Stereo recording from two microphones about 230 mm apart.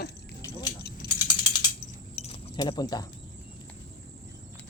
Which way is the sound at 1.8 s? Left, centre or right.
Left.